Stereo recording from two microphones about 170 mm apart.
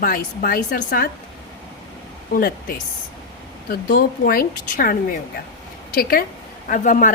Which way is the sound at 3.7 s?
60° left (ahead or behind).